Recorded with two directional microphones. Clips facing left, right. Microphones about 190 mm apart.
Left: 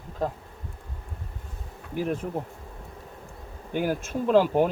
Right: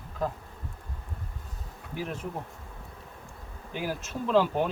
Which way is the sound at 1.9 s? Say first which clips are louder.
Left 7 dB; 50° left (ahead or behind).